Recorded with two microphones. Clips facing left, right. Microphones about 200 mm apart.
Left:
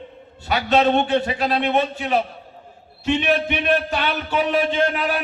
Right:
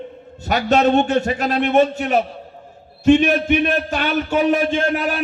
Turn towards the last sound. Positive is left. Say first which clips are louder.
# right 1 dB
turn(degrees=-45)  # may be behind; listen again after turning